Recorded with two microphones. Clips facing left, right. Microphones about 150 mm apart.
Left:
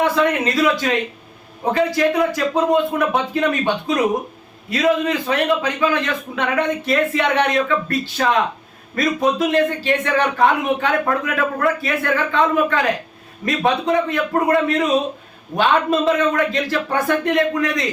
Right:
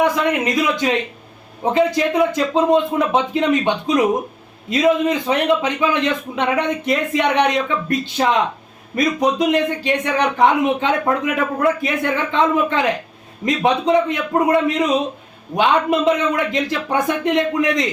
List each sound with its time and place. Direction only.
0.0 s a man's voice: 15° right (ahead or behind)